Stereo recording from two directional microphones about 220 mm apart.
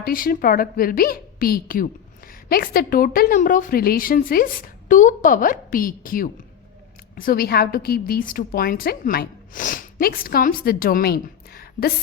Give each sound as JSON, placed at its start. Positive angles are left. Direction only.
{"t": 0.0, "sound": "a woman's voice", "side_deg": 40}